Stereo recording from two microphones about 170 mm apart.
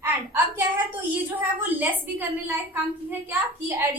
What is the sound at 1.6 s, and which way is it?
A woman's voice, 10° right (ahead or behind).